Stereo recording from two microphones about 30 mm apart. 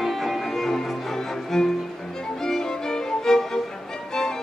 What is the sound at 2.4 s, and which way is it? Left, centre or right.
Violin, left.